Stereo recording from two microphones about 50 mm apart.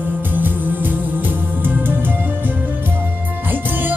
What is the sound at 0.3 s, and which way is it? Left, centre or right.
Music, right.